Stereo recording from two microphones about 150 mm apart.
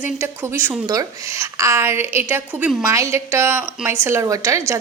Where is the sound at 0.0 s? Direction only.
15° right (ahead or behind).